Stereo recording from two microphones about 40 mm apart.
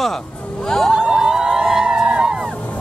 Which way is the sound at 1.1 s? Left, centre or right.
Centre.